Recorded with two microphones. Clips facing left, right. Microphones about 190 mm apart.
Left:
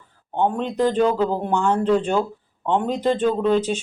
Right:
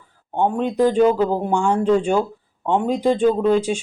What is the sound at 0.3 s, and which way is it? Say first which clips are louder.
Speech: right 2 dB; 10° right (ahead or behind).